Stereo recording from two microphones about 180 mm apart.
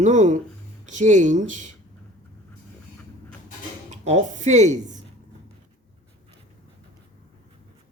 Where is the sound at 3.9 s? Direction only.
40° right (ahead or behind).